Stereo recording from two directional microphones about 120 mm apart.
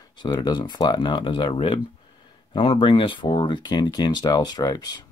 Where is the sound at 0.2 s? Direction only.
35° left (ahead or behind).